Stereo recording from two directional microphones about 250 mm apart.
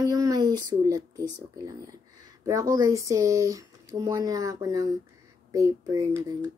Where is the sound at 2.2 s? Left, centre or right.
Centre.